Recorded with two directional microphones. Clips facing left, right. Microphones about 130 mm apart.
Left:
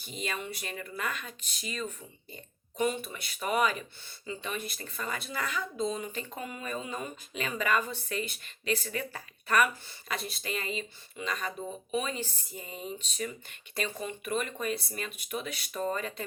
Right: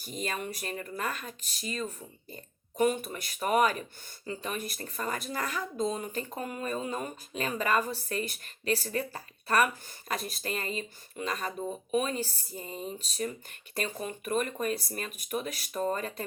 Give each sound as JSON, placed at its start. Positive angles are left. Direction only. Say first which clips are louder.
{"t": 0.0, "sound": "speech", "louder": "right 2 dB", "side_deg": -45}